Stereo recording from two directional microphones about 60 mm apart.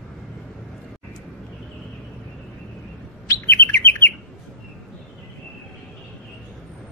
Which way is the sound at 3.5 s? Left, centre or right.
Left.